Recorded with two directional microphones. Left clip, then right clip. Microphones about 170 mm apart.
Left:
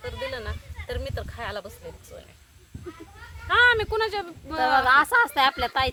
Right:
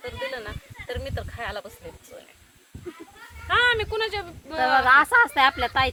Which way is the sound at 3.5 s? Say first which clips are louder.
Left 2 dB; 40° left (ahead or behind).